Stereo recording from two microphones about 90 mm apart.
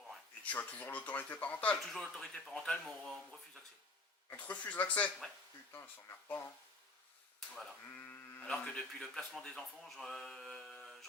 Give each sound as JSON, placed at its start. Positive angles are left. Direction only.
{"t": 0.4, "sound": "speech", "side_deg": 20}
{"t": 1.9, "sound": "speech", "side_deg": 5}
{"t": 4.3, "sound": "speech", "side_deg": 15}
{"t": 5.7, "sound": "speech", "side_deg": 30}
{"t": 7.5, "sound": "speech", "side_deg": 0}
{"t": 7.9, "sound": "sheep", "side_deg": 20}
{"t": 8.6, "sound": "speech", "side_deg": 10}